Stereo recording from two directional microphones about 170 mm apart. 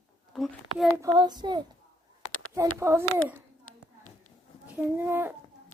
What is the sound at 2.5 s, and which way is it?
Speech, 15° right (ahead or behind).